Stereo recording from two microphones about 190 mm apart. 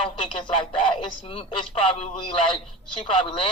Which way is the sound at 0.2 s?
25° left (ahead or behind).